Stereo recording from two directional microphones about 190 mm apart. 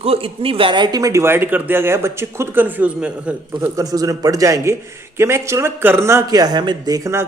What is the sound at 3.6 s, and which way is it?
Speech, 15° right (ahead or behind).